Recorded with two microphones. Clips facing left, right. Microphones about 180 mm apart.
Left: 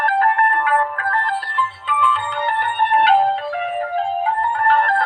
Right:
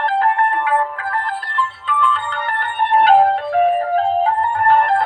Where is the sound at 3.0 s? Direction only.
50° right (ahead or behind).